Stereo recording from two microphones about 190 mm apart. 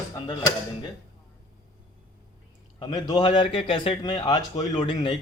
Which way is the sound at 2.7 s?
25° left (ahead or behind).